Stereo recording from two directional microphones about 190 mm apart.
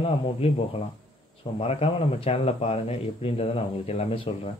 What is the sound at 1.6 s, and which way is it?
Speech, 30° left (ahead or behind).